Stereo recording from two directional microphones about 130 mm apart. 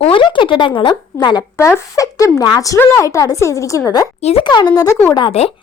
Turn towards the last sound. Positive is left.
turn(degrees=35)  # may be behind; listen again after turning